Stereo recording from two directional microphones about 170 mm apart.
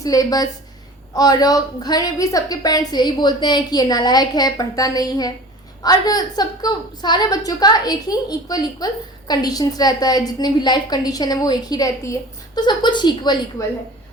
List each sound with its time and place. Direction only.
0.0 s a woman's voice: 20° left (ahead or behind)